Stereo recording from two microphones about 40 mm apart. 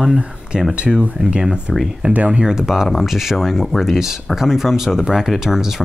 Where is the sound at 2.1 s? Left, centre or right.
Right.